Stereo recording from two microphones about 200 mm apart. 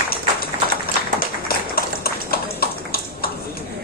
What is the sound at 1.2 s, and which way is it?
Clip-clop, 50° left (ahead or behind).